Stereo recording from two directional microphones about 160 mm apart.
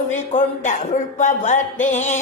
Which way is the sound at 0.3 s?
50° left (ahead or behind).